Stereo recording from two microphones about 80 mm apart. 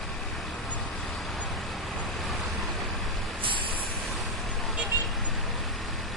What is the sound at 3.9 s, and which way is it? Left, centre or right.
Vehicle, centre.